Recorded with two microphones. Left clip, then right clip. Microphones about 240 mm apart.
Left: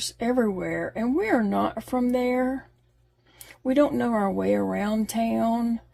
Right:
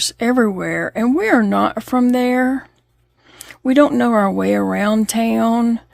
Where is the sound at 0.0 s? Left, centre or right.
Right.